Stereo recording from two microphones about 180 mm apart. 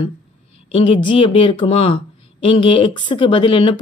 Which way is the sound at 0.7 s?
30° left (ahead or behind).